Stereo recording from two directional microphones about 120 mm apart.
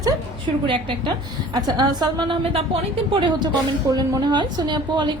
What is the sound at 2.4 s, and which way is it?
A woman's voice, 55° right (ahead or behind).